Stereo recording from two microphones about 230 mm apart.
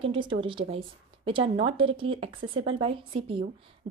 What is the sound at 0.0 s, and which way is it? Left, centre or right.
A woman's voice, right.